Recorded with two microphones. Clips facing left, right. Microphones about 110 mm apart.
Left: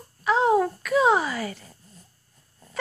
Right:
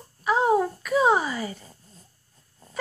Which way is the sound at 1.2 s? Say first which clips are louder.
Left 1 dB; 25° right (ahead or behind).